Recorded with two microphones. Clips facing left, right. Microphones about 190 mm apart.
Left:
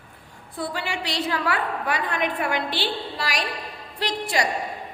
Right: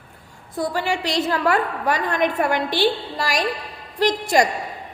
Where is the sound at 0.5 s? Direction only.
40° right (ahead or behind).